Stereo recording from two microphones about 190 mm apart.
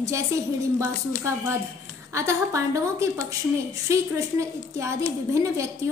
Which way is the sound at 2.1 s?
15° right (ahead or behind).